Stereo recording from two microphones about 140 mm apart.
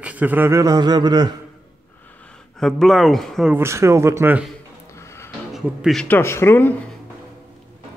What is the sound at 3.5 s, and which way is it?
Speech, 20° right (ahead or behind).